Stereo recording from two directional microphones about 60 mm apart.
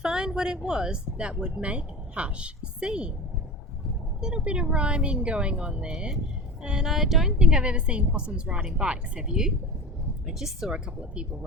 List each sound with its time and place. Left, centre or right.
0.0 s speech: centre
4.2 s a woman's voice: centre
10.8 s a woman's voice: centre